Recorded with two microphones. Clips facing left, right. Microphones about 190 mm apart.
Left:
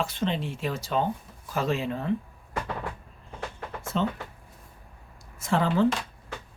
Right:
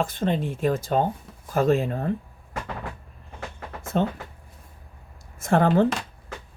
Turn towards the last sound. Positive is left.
turn(degrees=-50)  # may be behind; listen again after turning